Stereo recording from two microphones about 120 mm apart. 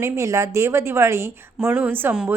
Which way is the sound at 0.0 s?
25° right (ahead or behind).